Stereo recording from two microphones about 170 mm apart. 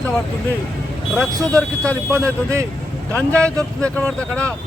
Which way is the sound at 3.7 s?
5° left (ahead or behind).